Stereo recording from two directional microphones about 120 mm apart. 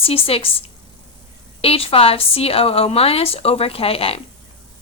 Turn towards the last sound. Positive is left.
turn(degrees=50)  # may be behind; listen again after turning